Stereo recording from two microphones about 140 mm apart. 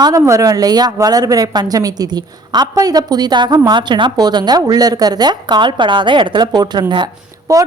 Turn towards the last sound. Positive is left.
turn(degrees=-25)  # may be behind; listen again after turning